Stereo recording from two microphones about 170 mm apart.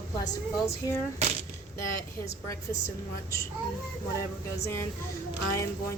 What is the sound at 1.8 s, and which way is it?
Speech, 20° left (ahead or behind).